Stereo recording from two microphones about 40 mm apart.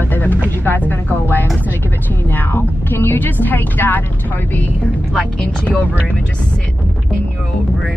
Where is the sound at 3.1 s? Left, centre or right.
Left.